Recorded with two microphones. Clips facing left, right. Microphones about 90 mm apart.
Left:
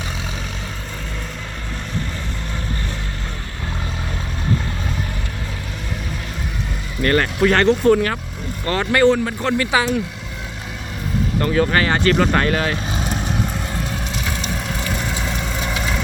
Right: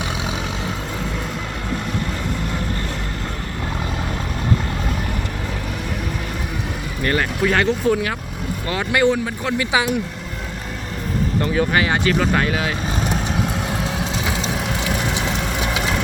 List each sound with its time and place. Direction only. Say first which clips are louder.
7.0 s speech: left 3 dB; 10° right (ahead or behind)
11.3 s speech: left 2 dB; 15° right (ahead or behind)
12.1 s vehicle: left 2 dB; centre (ahead or behind)
13.7 s vehicle: right 2 dB; 10° right (ahead or behind)
14.5 s a sound: right 2 dB; 5° right (ahead or behind)
14.8 s vehicle: right 2 dB; 10° right (ahead or behind)